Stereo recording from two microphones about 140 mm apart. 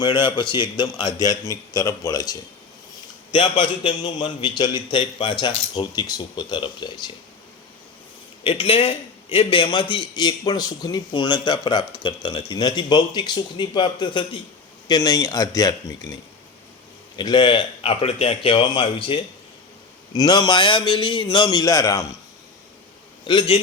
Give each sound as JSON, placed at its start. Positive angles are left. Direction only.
{"t": 0.0, "sound": "a man's voice", "side_deg": 35}
{"t": 8.4, "sound": "a man's voice", "side_deg": 40}
{"t": 17.2, "sound": "a man's voice", "side_deg": 30}
{"t": 23.2, "sound": "a man's voice", "side_deg": 35}